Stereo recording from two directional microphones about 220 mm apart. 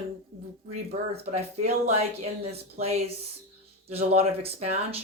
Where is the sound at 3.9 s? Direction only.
25° right (ahead or behind).